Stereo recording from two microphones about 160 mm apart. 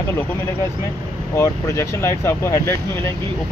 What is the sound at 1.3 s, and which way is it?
Speech, 20° left (ahead or behind).